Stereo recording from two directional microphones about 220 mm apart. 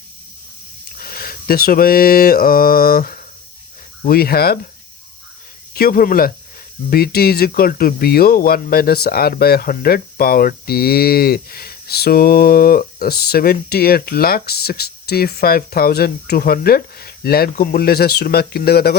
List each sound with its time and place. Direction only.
0.9 s mantra: 40° left (ahead or behind)
4.0 s speech: 45° left (ahead or behind)
5.7 s speech: 40° left (ahead or behind)